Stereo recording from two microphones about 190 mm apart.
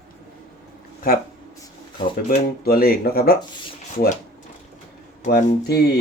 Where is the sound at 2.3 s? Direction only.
50° left (ahead or behind).